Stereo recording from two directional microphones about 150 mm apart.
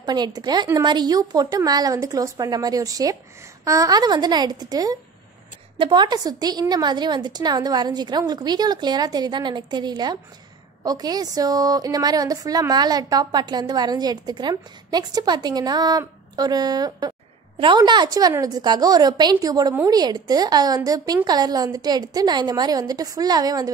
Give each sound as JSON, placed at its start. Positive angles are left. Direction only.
{"t": 0.0, "sound": "a woman's voice", "side_deg": -25}